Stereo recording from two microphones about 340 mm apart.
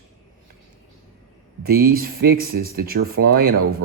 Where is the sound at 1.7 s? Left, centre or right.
Right.